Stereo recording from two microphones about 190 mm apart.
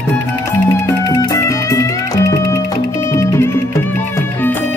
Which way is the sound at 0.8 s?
20° left (ahead or behind).